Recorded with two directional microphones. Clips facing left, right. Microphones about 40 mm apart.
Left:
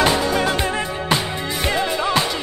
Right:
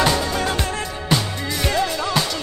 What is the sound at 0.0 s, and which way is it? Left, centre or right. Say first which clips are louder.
Music: left 2 dB; left.